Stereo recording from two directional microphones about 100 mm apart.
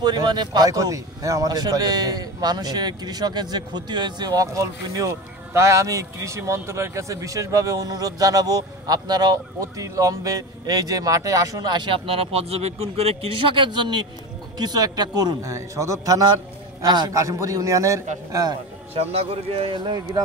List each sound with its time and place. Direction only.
0.0 s speech: 45° right (ahead or behind)
12.1 s speech: 75° right (ahead or behind); by 18.5 s 30° right (ahead or behind)
18.9 s speech: 80° right